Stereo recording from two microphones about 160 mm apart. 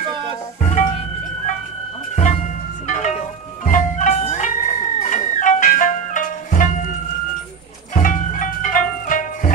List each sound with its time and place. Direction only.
0.6 s music: 50° left (ahead or behind)
7.9 s music: 55° left (ahead or behind)